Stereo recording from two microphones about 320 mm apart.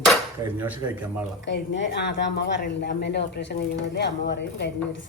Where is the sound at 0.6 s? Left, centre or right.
Centre.